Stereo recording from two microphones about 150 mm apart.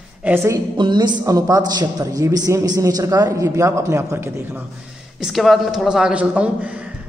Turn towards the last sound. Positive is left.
turn(degrees=-10)  # may be behind; listen again after turning